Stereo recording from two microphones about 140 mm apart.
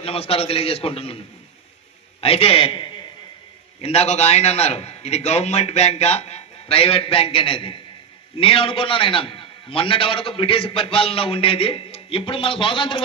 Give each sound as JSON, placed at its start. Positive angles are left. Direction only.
{"t": 0.0, "sound": "a man's voice", "side_deg": 45}
{"t": 2.2, "sound": "a man's voice", "side_deg": 45}